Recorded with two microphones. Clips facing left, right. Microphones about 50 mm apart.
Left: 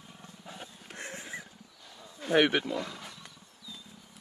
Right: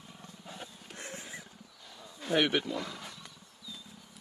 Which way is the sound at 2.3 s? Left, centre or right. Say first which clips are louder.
Left 3 dB; left.